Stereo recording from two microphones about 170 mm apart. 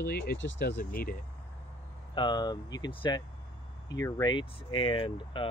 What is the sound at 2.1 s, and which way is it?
Speech, 25° left (ahead or behind).